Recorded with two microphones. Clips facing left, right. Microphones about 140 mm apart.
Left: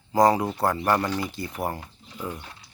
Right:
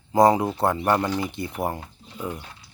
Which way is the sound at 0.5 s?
25° right (ahead or behind).